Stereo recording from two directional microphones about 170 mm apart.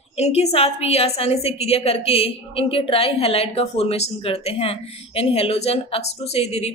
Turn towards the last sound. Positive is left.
turn(degrees=40)  # may be behind; listen again after turning